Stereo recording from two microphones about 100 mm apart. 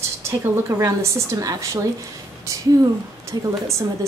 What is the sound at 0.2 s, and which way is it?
A woman's voice, 25° right (ahead or behind).